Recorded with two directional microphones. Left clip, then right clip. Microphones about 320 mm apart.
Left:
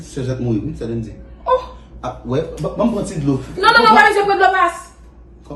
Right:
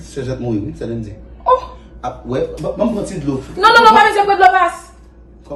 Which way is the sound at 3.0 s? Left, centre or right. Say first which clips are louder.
Even; left.